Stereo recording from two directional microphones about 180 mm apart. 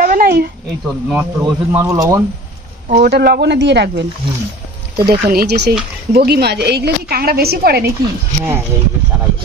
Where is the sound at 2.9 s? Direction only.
65° right (ahead or behind).